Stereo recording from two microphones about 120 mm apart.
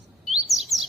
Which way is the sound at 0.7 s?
25° left (ahead or behind).